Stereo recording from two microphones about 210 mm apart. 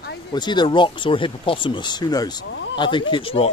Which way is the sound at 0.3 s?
20° left (ahead or behind).